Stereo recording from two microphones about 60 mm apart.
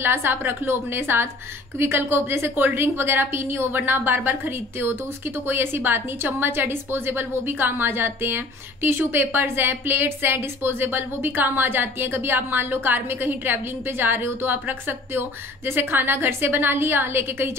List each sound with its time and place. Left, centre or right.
0.0 s a woman's voice: right